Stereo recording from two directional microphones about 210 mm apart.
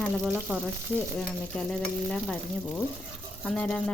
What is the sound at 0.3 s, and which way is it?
Frying, 5° right (ahead or behind).